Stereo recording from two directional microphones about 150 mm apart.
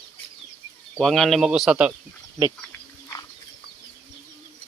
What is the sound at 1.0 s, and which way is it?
Speech, centre (ahead or behind).